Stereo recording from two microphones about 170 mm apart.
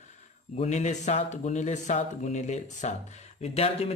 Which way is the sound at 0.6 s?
45° left (ahead or behind).